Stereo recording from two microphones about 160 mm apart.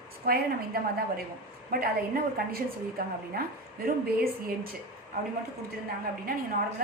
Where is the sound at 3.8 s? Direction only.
70° right (ahead or behind).